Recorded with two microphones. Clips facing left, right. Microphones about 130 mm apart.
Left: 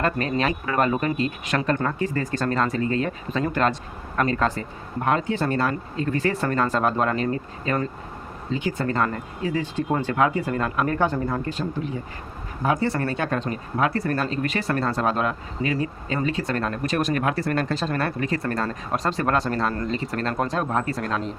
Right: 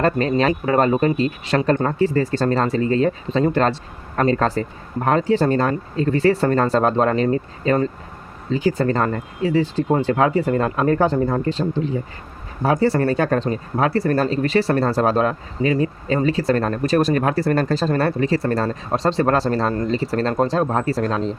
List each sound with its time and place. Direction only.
0.0 s speech: 35° right (ahead or behind)